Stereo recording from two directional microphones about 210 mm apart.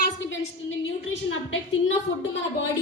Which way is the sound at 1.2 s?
65° left (ahead or behind).